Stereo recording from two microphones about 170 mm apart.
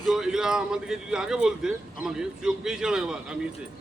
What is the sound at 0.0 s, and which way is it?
Speech, centre (ahead or behind).